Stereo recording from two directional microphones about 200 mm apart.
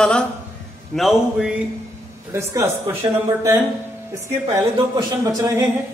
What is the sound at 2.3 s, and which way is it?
Speech, 15° right (ahead or behind).